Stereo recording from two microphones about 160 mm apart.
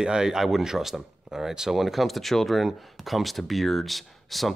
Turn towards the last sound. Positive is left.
turn(degrees=0)  # may be behind; listen again after turning